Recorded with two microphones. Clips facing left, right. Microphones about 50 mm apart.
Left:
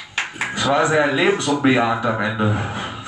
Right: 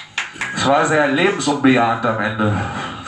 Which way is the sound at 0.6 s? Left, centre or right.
Right.